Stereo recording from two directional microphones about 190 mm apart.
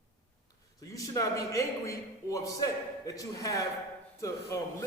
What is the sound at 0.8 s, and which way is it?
A man's voice, 15° left (ahead or behind).